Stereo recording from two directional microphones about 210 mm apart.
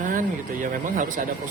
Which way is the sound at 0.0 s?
35° right (ahead or behind).